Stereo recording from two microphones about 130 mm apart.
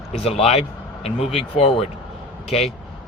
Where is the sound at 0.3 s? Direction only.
50° left (ahead or behind).